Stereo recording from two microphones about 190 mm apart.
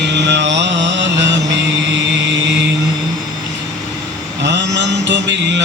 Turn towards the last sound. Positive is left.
turn(degrees=-70)  # may be behind; listen again after turning